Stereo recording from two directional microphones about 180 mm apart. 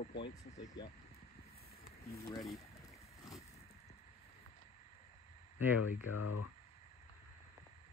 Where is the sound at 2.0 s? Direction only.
20° left (ahead or behind).